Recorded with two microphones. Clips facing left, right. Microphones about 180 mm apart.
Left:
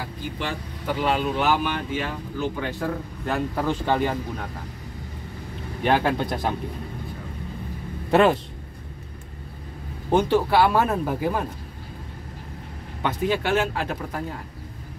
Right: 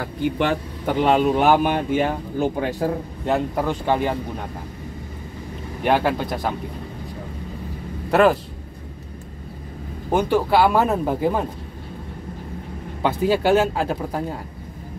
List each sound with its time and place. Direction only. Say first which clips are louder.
0.0 s speech: right 9 dB; 60° right (ahead or behind); by 2.9 s 40° right (ahead or behind)
3.3 s speech: right 3 dB; 20° right (ahead or behind)
5.9 s speech: right 2 dB; 10° right (ahead or behind)
8.1 s speech: right 2 dB; centre (ahead or behind)
10.1 s speech: right 1 dB; 15° right (ahead or behind)
13.0 s speech: right 5 dB; 35° right (ahead or behind)